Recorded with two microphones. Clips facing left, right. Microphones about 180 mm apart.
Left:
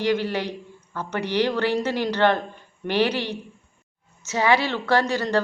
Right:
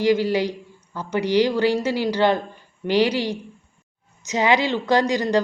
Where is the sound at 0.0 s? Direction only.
10° right (ahead or behind).